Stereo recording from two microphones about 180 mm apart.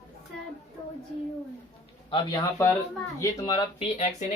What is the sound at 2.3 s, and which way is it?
Speech, 15° left (ahead or behind).